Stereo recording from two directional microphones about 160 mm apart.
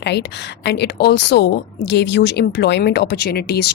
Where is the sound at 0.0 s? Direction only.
90° left.